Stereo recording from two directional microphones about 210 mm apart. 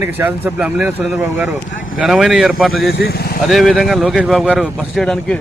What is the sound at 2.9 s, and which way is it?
Speech, 50° left (ahead or behind).